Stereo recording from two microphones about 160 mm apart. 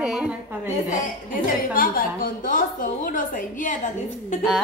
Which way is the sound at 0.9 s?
55° left (ahead or behind).